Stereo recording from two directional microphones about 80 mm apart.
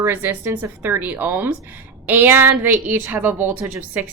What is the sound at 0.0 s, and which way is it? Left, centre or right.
Speech, right.